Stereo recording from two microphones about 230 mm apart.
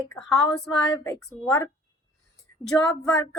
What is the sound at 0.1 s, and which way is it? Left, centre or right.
A woman's voice, centre.